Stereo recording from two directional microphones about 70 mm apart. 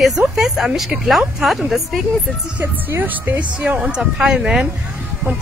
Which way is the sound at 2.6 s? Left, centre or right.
Right.